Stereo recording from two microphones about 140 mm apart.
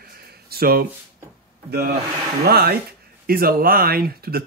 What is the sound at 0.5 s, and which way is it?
Speech, 90° right.